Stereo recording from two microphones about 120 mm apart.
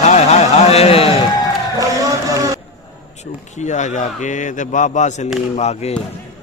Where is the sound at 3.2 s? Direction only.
80° left.